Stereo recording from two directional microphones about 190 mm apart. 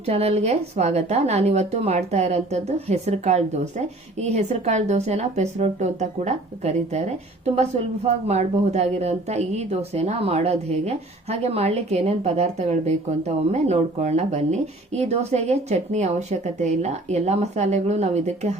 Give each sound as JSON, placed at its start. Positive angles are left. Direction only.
{"t": 0.0, "sound": "a woman's voice", "side_deg": -35}